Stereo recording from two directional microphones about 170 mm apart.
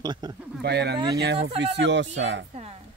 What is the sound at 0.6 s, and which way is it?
Speech, 75° right (ahead or behind).